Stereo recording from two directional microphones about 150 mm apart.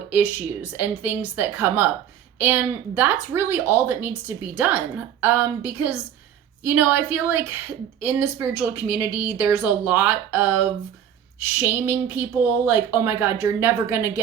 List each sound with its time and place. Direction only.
0.1 s a woman's voice: 10° right (ahead or behind)